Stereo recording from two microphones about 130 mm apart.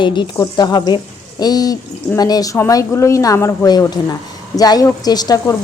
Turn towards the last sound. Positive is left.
turn(degrees=30)  # may be behind; listen again after turning